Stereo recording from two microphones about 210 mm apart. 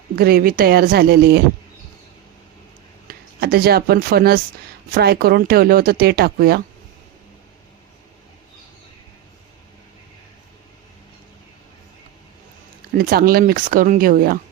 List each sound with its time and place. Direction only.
0.2 s speech: 45° right (ahead or behind)
3.1 s speech: 45° right (ahead or behind)
13.0 s speech: 45° right (ahead or behind)